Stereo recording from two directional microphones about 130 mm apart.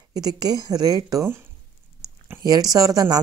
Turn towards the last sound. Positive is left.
turn(degrees=-30)  # may be behind; listen again after turning